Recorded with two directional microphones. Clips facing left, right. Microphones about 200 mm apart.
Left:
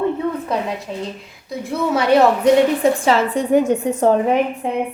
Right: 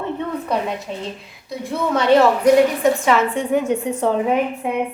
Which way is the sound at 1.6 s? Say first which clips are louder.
Even; 10° left (ahead or behind).